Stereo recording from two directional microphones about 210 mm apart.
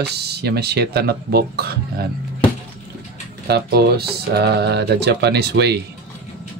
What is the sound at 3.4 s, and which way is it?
Speech, 50° right (ahead or behind).